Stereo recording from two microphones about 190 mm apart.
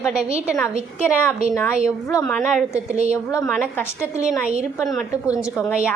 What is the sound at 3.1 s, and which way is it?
Speech, 15° left (ahead or behind).